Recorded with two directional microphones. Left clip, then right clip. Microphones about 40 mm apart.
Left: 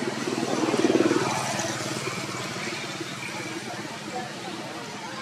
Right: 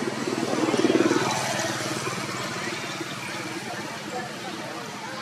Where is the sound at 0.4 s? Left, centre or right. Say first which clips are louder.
Right 1 dB; centre.